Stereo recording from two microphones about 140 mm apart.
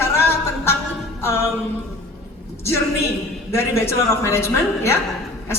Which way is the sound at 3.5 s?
20° left (ahead or behind).